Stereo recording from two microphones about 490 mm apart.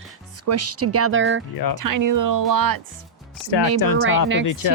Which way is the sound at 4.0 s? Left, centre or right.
Right.